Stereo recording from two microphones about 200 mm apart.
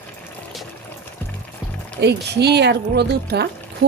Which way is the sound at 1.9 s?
55° right (ahead or behind).